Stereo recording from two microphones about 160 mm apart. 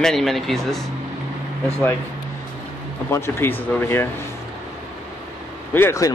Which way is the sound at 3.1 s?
15° left (ahead or behind).